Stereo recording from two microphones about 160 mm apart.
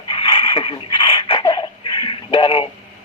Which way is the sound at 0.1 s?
35° left (ahead or behind).